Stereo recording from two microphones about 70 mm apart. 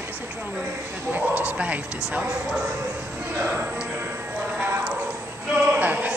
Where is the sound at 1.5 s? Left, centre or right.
Centre.